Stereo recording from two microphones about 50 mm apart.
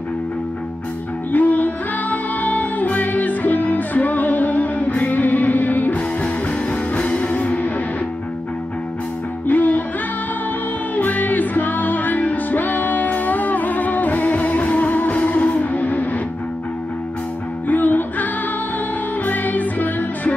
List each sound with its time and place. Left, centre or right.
1.3 s music: left
9.5 s music: left
11.0 s music: left
17.6 s music: left